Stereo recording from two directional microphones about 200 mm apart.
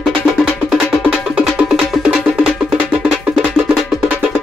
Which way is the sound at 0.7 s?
5° right (ahead or behind).